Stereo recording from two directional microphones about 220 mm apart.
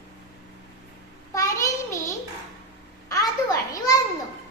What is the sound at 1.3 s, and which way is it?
Child singing, 15° left (ahead or behind).